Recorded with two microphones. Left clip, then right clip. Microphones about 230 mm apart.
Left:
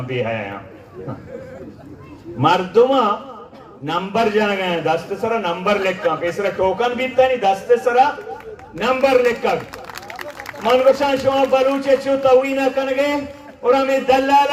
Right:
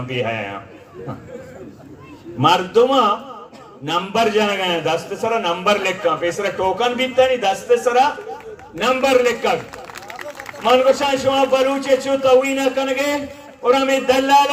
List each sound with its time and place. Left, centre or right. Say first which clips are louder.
0.1 s a man's voice: even; right
2.4 s a man's voice: even; right
10.6 s a man's voice: even; right